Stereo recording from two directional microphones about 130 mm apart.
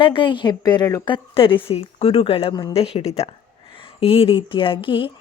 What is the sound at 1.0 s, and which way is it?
A woman's voice, 40° left (ahead or behind).